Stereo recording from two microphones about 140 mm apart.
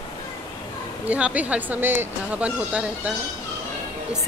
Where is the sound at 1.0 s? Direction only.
10° right (ahead or behind).